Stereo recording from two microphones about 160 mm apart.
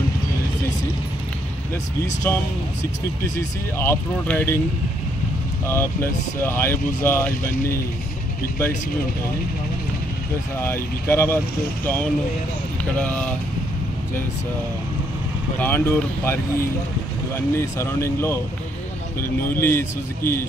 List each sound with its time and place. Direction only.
2.2 s speech: 15° left (ahead or behind)
5.7 s speech: 15° left (ahead or behind)
10.6 s speech: 15° left (ahead or behind)
15.6 s speech: 15° left (ahead or behind)
19.6 s speech: 15° left (ahead or behind)